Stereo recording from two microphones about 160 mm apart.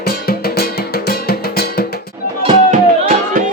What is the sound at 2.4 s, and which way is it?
Music, 50° right (ahead or behind).